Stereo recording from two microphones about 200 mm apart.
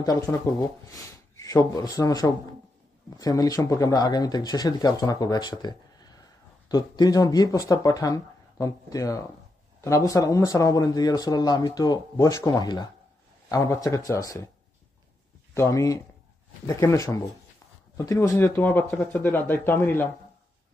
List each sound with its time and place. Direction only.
0.0 s speech: 20° left (ahead or behind)
15.5 s speech: 15° left (ahead or behind)